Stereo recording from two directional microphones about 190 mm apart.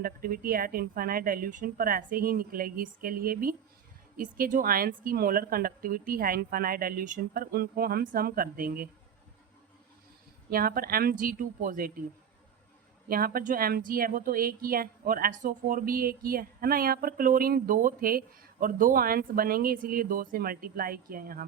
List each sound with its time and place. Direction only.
0.0 s speech: 50° right (ahead or behind)
10.5 s speech: 50° right (ahead or behind)
13.1 s speech: 50° right (ahead or behind)